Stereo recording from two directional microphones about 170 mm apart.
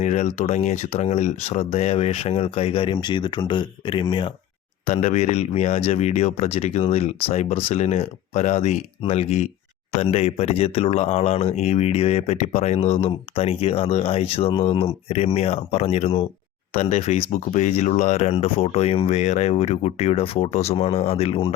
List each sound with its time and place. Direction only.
0.0 s speech: 40° left (ahead or behind)